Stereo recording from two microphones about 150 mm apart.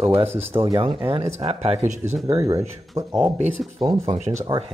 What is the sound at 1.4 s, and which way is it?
Speech, 40° right (ahead or behind).